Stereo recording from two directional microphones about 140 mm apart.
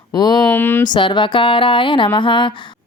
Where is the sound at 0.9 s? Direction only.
35° left (ahead or behind).